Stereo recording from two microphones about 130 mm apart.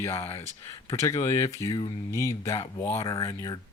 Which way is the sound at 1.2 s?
20° left (ahead or behind).